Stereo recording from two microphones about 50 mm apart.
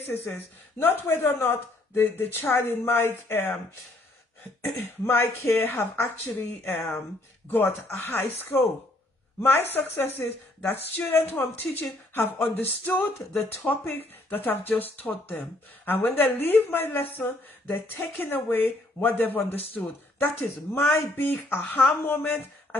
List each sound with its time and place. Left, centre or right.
0.7 s speech: left
4.6 s speech: left
5.6 s speech: left
5.9 s speech: left
7.4 s speech: left